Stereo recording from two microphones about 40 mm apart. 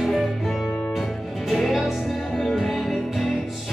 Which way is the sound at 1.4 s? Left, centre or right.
Centre.